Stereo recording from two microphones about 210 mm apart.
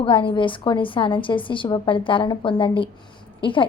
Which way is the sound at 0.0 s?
25° left (ahead or behind).